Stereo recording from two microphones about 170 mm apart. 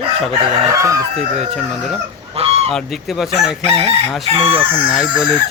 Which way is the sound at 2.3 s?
35° right (ahead or behind).